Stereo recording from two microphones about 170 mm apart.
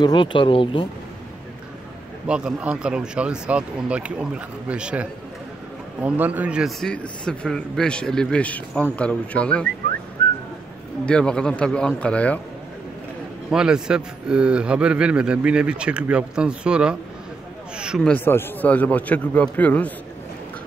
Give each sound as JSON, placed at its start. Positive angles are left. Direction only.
{"t": 0.0, "sound": "speech", "side_deg": 25}
{"t": 2.2, "sound": "a man's voice", "side_deg": -5}
{"t": 6.0, "sound": "a man's voice", "side_deg": -10}
{"t": 11.1, "sound": "a man's voice", "side_deg": 5}
{"t": 13.5, "sound": "a man's voice", "side_deg": -5}
{"t": 18.1, "sound": "a man's voice", "side_deg": 10}